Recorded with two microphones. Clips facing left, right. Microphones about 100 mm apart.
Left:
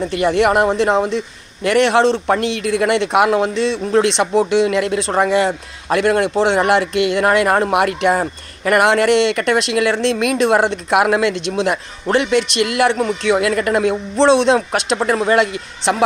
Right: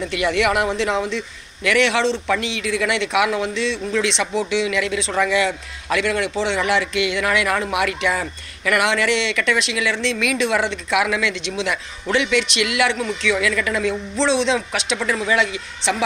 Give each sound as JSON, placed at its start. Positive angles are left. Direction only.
{"t": 0.0, "sound": "a man's voice", "side_deg": 40}